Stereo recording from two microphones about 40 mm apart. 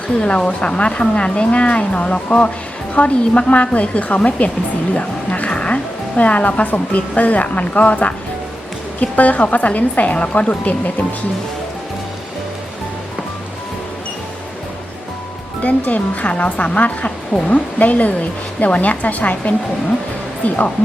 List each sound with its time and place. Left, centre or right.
0.2 s a woman's voice: left
15.6 s a woman's voice: left